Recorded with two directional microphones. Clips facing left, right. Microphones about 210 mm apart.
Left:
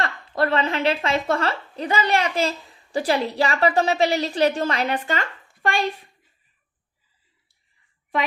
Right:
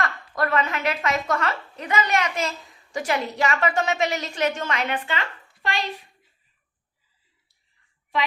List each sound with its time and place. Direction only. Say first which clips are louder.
0.0 s a woman's voice: left 3 dB; 30° left (ahead or behind); by 5.8 s 50° left (ahead or behind)